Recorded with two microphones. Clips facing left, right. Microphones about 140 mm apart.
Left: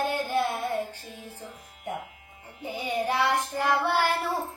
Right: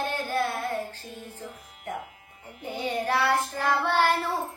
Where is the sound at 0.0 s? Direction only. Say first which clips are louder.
Left 2 dB; 15° left (ahead or behind).